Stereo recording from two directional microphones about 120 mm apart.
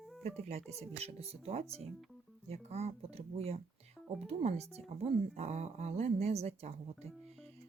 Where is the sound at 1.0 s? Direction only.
60° right (ahead or behind).